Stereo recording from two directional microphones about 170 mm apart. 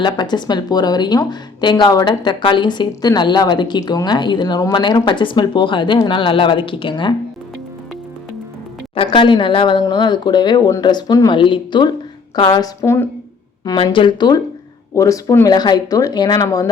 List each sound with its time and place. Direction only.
0.0 s speech: 25° left (ahead or behind)
9.0 s speech: 30° left (ahead or behind)
13.7 s speech: 30° left (ahead or behind)